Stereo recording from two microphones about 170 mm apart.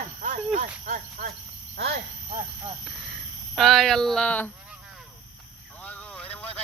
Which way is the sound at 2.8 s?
Centre (ahead or behind).